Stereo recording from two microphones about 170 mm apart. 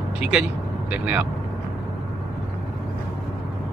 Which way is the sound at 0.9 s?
10° right (ahead or behind).